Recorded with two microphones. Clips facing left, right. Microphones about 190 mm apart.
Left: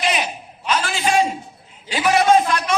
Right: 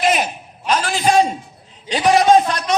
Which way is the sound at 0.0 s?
50° right (ahead or behind).